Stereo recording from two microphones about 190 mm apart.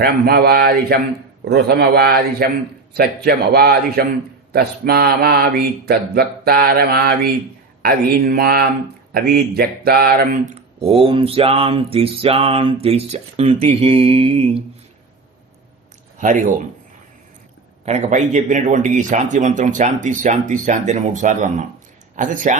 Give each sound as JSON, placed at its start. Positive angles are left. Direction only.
{"t": 0.0, "sound": "speech", "side_deg": -55}
{"t": 10.5, "sound": "speech", "side_deg": -30}
{"t": 16.1, "sound": "speech", "side_deg": -45}
{"t": 17.8, "sound": "speech", "side_deg": -35}